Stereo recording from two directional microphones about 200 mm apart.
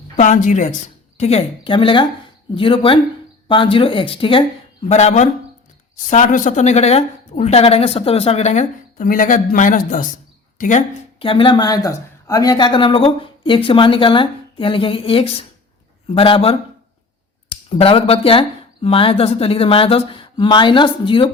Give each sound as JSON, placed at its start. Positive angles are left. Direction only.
{"t": 0.2, "sound": "speech", "side_deg": 35}